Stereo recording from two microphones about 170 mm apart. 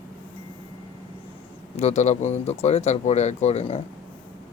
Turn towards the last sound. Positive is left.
turn(degrees=35)  # may be behind; listen again after turning